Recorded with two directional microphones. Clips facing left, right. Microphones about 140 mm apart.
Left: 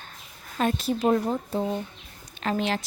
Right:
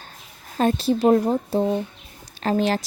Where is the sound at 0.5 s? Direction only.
35° right (ahead or behind).